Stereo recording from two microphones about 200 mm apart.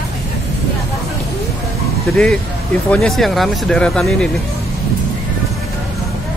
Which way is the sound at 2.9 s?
5° left (ahead or behind).